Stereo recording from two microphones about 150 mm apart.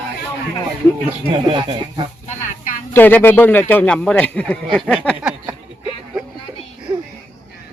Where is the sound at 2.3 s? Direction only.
55° left (ahead or behind).